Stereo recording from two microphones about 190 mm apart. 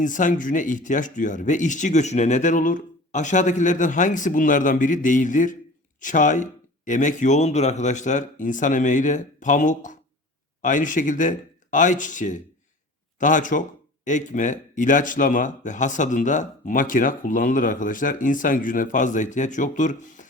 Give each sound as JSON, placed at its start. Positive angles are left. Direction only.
{"t": 0.0, "sound": "speech", "side_deg": 40}